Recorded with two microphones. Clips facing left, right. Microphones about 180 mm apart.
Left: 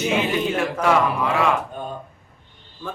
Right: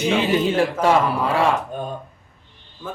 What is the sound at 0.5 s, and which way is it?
Speech, 30° right (ahead or behind).